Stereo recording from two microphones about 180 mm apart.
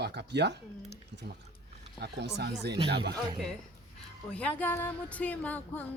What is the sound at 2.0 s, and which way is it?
Speech, 70° right (ahead or behind).